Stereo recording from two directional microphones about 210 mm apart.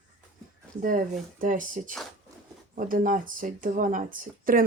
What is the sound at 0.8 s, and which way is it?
Speech, 40° right (ahead or behind).